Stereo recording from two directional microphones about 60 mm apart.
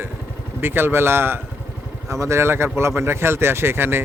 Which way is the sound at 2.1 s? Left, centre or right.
Right.